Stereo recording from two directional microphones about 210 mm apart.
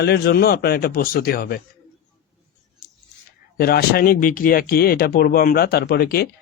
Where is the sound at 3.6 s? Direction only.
45° left (ahead or behind).